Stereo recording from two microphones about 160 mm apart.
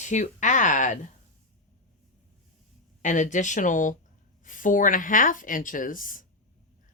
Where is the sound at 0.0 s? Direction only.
50° left (ahead or behind).